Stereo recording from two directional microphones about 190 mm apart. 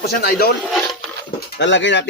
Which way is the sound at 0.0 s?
55° left (ahead or behind).